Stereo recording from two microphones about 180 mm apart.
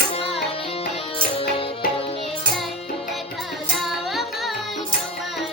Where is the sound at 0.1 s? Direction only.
30° left (ahead or behind).